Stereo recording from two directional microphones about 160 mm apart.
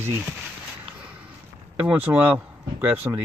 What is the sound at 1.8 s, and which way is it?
Speech, 10° right (ahead or behind).